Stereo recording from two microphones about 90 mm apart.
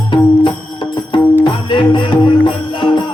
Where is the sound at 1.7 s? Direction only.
60° left (ahead or behind).